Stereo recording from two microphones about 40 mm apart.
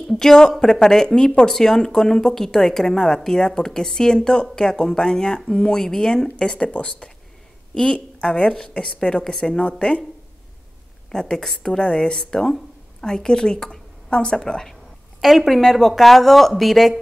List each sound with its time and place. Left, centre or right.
0.1 s speech: centre
6.3 s a woman's voice: left
11.1 s a woman's voice: centre
15.1 s speech: centre